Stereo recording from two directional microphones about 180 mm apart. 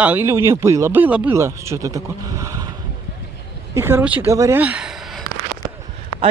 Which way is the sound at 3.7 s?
15° right (ahead or behind).